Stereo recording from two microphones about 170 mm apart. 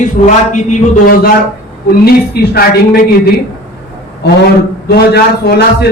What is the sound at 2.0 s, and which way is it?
A man's voice, 65° left (ahead or behind).